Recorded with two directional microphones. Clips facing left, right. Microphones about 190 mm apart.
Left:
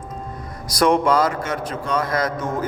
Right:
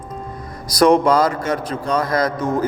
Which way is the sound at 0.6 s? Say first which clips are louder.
Right 4 dB; 35° right (ahead or behind).